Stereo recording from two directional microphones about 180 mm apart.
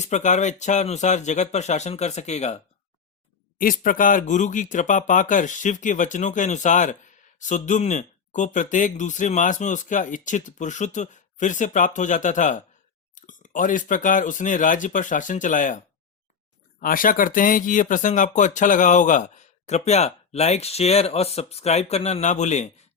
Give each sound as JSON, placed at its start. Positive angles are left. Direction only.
{"t": 0.0, "sound": "speech", "side_deg": 40}
{"t": 3.6, "sound": "speech", "side_deg": 50}
{"t": 16.8, "sound": "speech", "side_deg": 50}